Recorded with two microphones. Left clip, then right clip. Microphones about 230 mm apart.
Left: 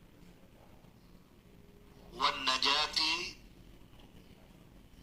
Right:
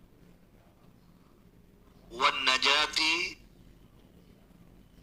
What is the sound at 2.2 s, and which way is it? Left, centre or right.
A man's voice, right.